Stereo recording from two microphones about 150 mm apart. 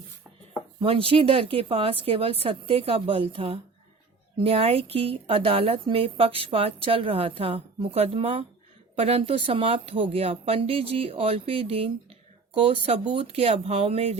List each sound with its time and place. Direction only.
0.8 s speech: 35° right (ahead or behind)